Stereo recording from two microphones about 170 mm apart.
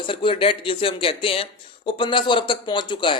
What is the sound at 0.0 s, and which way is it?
Speech, 30° left (ahead or behind).